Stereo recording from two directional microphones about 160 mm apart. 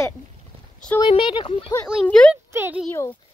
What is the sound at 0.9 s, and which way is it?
Speech, 30° left (ahead or behind).